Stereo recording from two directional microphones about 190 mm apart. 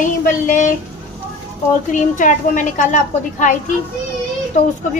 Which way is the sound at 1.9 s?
40° left (ahead or behind).